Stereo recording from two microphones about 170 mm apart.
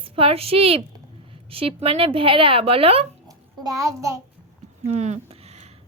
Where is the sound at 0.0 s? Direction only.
35° right (ahead or behind).